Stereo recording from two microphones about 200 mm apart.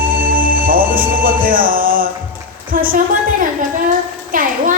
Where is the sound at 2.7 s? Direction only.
45° right (ahead or behind).